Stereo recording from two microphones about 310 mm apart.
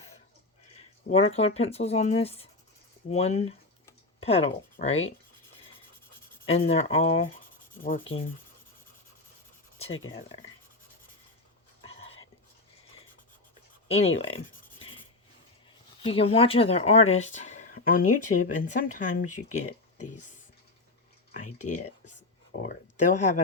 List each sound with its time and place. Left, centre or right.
1.1 s speech: left
1.4 s speech: centre
3.8 s a sound: centre
6.4 s speech: centre
9.9 s speech: left
13.8 s speech: centre
16.0 s speech: centre
21.6 s speech: left